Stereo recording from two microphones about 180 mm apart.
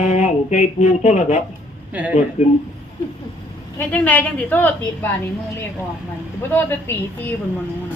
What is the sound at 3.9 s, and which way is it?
A woman's voice, 10° left (ahead or behind).